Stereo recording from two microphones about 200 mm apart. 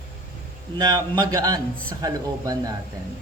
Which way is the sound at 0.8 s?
20° right (ahead or behind).